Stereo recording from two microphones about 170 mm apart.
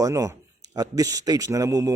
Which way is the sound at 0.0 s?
20° right (ahead or behind).